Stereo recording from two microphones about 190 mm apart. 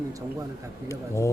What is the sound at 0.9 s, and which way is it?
Speech, 15° left (ahead or behind).